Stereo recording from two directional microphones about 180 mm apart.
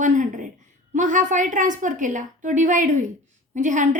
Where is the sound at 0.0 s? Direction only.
45° right (ahead or behind).